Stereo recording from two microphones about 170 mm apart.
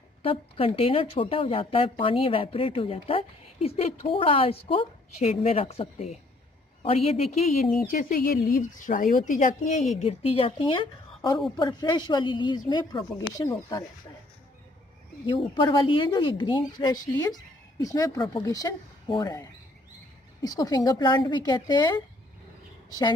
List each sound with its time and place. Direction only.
0.2 s speech: 35° left (ahead or behind)
7.8 s speech: 55° left (ahead or behind); by 13.8 s 20° left (ahead or behind)
15.2 s speech: 30° left (ahead or behind)
20.4 s speech: 20° left (ahead or behind)